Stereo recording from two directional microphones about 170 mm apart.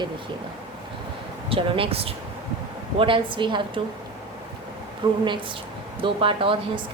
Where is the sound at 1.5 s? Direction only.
30° right (ahead or behind).